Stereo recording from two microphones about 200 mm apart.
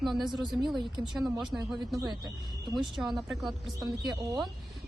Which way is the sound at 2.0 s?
20° right (ahead or behind).